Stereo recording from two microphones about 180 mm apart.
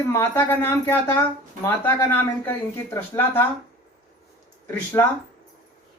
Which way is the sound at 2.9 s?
10° left (ahead or behind).